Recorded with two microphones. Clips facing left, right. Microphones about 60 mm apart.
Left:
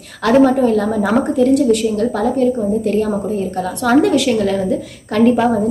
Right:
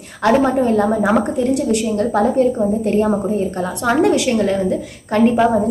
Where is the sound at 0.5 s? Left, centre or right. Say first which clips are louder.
Left 1 dB; right.